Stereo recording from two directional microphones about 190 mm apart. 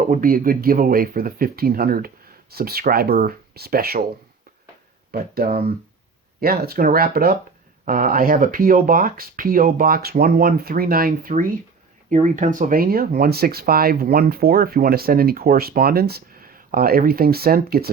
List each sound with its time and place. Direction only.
0.0 s speech: 45° right (ahead or behind)
5.1 s speech: 50° right (ahead or behind)